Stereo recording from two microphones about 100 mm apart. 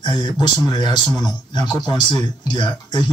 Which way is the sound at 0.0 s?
45° left (ahead or behind).